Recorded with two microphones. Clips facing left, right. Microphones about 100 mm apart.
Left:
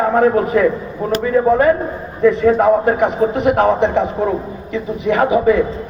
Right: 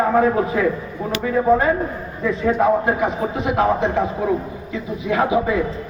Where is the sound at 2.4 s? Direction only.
65° left (ahead or behind).